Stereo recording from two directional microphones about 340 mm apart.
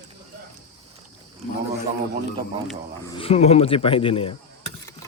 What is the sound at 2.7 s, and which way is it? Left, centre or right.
Speech, centre.